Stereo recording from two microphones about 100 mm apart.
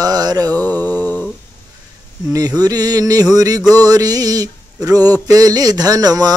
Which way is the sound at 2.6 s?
40° right (ahead or behind).